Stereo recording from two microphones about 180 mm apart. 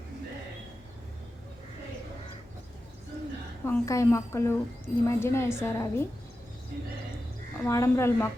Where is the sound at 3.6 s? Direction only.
15° left (ahead or behind).